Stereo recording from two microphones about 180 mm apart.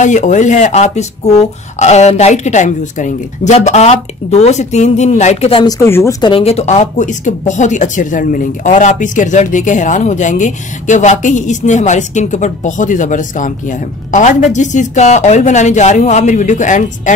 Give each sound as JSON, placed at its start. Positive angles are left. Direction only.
{"t": 0.0, "sound": "speech", "side_deg": 45}
{"t": 6.2, "sound": "speech", "side_deg": 30}